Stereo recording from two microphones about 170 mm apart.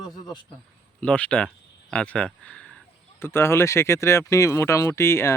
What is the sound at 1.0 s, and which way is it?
A man's voice, 5° left (ahead or behind).